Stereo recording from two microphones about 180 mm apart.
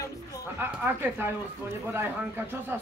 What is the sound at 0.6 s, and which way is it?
A man's voice, 10° right (ahead or behind).